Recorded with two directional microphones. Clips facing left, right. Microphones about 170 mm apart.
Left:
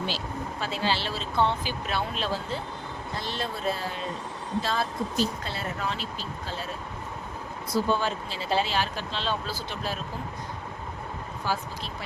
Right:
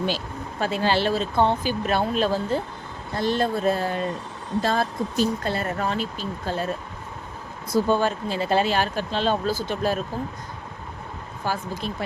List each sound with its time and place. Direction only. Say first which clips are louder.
0.6 s speech: right 8 dB; 50° right (ahead or behind)
7.7 s speech: right 5 dB; 50° right (ahead or behind)
11.4 s speech: right 4 dB; 50° right (ahead or behind)